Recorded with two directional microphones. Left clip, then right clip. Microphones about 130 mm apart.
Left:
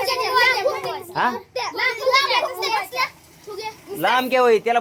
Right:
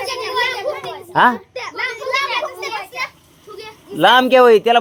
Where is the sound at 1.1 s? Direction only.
65° right (ahead or behind).